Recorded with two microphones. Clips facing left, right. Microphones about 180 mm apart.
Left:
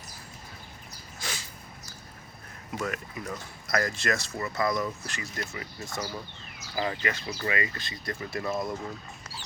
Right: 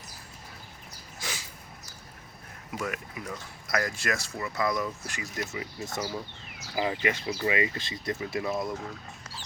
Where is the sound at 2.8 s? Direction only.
10° right (ahead or behind).